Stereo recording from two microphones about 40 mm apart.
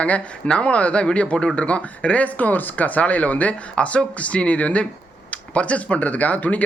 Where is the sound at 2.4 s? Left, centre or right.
Left.